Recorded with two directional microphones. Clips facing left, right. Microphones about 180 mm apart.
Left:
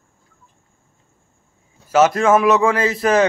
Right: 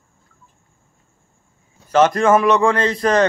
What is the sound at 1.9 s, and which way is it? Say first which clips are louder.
A man's voice: even; 5° left (ahead or behind).